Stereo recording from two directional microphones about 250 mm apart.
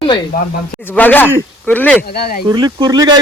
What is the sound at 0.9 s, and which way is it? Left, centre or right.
Speech, centre.